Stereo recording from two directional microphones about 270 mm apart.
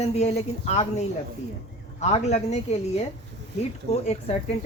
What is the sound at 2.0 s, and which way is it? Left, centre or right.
Speech, left.